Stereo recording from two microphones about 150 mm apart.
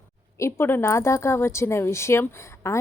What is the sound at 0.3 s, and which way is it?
A woman's voice, 15° left (ahead or behind).